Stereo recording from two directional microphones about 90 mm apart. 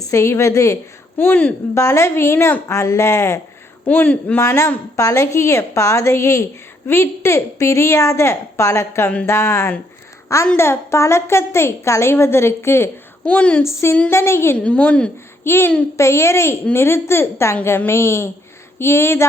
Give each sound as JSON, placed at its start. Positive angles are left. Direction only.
{"t": 0.0, "sound": "a woman's voice", "side_deg": 35}
{"t": 1.2, "sound": "a woman's voice", "side_deg": 20}
{"t": 1.7, "sound": "a woman's voice", "side_deg": 35}
{"t": 3.8, "sound": "a woman's voice", "side_deg": 20}
{"t": 4.4, "sound": "a woman's voice", "side_deg": 30}
{"t": 13.2, "sound": "a woman's voice", "side_deg": 15}
{"t": 13.6, "sound": "a woman's voice", "side_deg": 30}
{"t": 14.5, "sound": "a woman's voice", "side_deg": 15}
{"t": 15.4, "sound": "a woman's voice", "side_deg": 25}